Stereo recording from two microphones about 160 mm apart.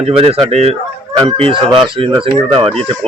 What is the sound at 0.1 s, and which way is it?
A man's voice, 35° right (ahead or behind).